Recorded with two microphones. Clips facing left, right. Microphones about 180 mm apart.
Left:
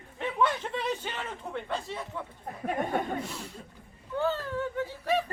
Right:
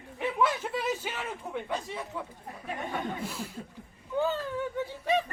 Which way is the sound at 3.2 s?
5° right (ahead or behind).